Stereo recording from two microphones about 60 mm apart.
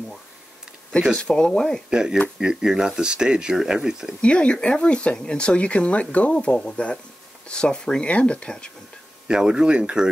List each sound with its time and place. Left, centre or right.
1.1 s speech: centre
1.9 s speech: centre
4.2 s speech: centre
9.3 s speech: centre